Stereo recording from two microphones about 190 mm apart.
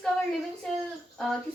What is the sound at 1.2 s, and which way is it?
Speech, 5° left (ahead or behind).